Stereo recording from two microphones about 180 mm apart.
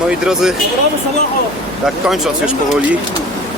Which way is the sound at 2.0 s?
Centre (ahead or behind).